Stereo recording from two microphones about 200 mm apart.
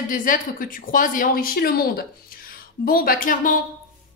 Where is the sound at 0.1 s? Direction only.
40° left (ahead or behind).